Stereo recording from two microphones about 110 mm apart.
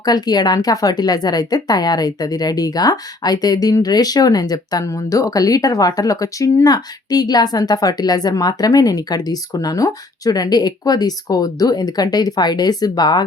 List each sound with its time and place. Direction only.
0.0 s a woman's voice: 35° left (ahead or behind)